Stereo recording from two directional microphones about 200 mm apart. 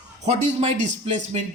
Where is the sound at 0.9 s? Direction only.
35° right (ahead or behind).